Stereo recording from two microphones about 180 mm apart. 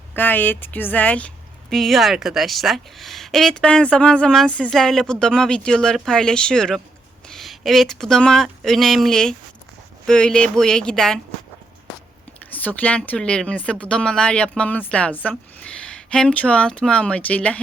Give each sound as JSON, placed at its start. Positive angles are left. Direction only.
{"t": 0.1, "sound": "a woman's voice", "side_deg": 10}
{"t": 12.5, "sound": "speech", "side_deg": 10}